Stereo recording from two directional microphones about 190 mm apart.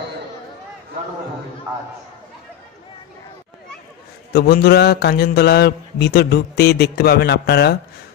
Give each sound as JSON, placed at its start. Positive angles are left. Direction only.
{"t": 4.3, "sound": "a man's voice", "side_deg": 55}